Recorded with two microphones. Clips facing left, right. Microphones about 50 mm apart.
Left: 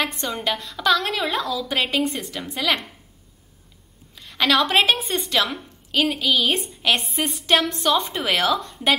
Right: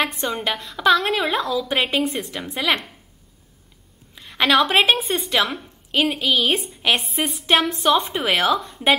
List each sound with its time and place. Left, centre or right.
0.0 s a woman's voice: centre
4.1 s a woman's voice: centre